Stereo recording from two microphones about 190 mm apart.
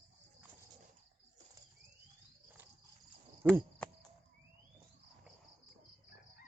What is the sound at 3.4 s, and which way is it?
Cricket, 10° right (ahead or behind).